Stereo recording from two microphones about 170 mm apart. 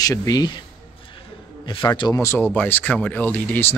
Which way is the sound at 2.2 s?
15° left (ahead or behind).